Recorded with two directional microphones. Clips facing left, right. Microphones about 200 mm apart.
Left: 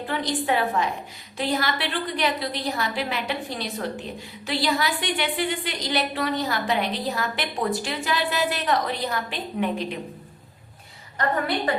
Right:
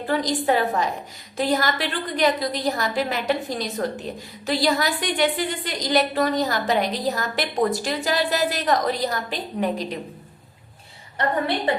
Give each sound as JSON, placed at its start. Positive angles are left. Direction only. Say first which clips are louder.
{"t": 0.1, "sound": "a woman's voice", "louder": "right 4 dB", "side_deg": -40}